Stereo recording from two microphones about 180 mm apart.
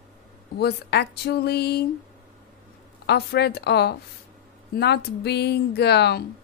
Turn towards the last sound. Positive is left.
turn(degrees=65)  # may be behind; listen again after turning